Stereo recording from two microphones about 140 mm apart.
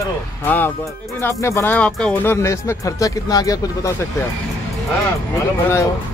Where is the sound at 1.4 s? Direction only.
15° left (ahead or behind).